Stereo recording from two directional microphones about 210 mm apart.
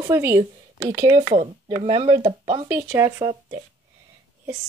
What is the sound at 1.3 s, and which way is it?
Speech, 30° right (ahead or behind).